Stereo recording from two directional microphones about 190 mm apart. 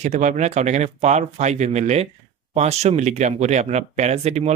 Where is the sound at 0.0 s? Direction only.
40° right (ahead or behind).